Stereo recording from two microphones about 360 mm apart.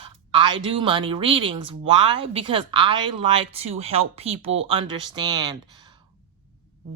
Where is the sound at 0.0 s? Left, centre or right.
Centre.